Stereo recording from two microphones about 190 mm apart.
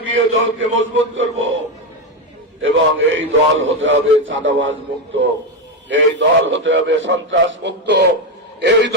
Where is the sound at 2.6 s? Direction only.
90° right.